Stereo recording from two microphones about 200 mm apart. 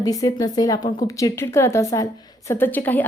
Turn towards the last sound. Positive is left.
turn(degrees=10)  # may be behind; listen again after turning